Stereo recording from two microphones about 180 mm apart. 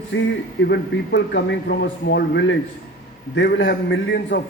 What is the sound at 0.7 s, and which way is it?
A man's voice, 70° left (ahead or behind).